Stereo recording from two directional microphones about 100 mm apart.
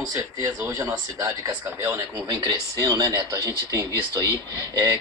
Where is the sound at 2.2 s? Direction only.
40° right (ahead or behind).